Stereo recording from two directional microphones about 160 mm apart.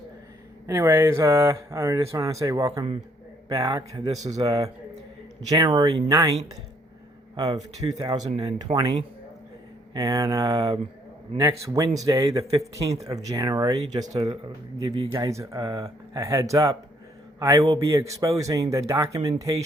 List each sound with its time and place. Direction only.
0.7 s speech: 15° right (ahead or behind)
7.3 s speech: 25° right (ahead or behind)
9.9 s speech: 20° right (ahead or behind)
11.9 s speech: 20° right (ahead or behind)